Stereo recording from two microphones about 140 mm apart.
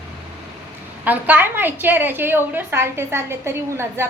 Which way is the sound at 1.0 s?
10° right (ahead or behind).